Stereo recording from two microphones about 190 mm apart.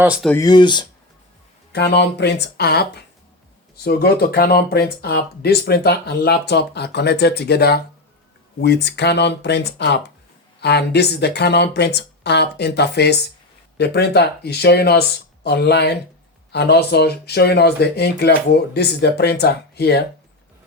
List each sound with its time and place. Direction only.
0.0 s speech: 5° right (ahead or behind)
0.3 s speech: 20° left (ahead or behind)
1.7 s speech: 60° left (ahead or behind)